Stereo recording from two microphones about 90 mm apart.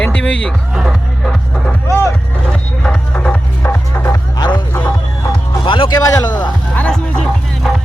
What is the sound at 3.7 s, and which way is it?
Music, 25° left (ahead or behind).